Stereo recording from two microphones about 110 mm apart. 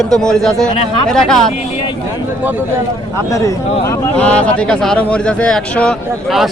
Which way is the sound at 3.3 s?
30° left (ahead or behind).